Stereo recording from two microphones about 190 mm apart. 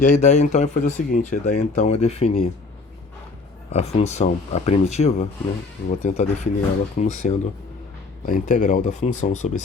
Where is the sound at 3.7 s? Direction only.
35° left (ahead or behind).